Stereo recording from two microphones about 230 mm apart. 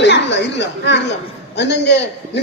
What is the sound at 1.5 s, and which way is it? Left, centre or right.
Speech, left.